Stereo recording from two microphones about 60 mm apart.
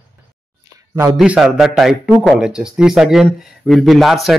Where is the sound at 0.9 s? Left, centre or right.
Right.